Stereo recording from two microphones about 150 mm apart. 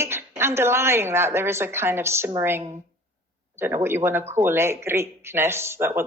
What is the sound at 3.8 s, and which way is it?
Speech, 15° right (ahead or behind).